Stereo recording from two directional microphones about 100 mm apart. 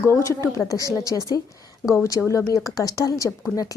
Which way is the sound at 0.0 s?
30° left (ahead or behind).